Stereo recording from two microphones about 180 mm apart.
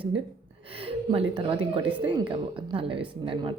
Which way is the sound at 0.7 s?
30° right (ahead or behind).